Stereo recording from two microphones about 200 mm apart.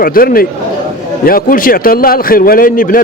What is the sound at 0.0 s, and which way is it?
Speech, 45° left (ahead or behind).